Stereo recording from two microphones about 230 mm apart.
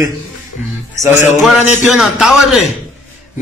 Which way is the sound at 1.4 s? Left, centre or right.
Centre.